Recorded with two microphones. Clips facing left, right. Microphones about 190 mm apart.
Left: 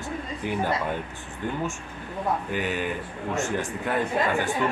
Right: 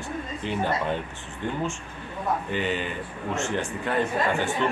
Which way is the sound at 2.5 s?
5° left (ahead or behind).